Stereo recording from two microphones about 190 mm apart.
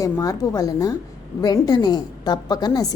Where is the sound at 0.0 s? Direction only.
20° left (ahead or behind).